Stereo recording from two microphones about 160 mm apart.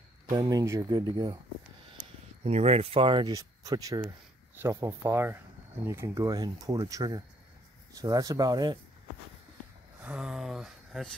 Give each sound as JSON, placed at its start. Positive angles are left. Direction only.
{"t": 0.3, "sound": "speech", "side_deg": -25}
{"t": 2.4, "sound": "speech", "side_deg": -40}
{"t": 10.0, "sound": "speech", "side_deg": -5}